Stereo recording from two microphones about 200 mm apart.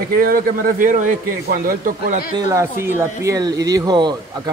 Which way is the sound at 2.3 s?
15° right (ahead or behind).